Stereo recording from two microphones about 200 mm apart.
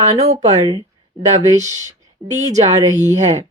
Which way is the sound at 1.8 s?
15° right (ahead or behind).